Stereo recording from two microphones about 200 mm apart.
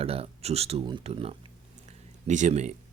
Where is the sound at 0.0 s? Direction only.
30° right (ahead or behind).